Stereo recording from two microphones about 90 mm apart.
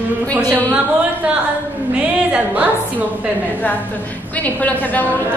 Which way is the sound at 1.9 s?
10° right (ahead or behind).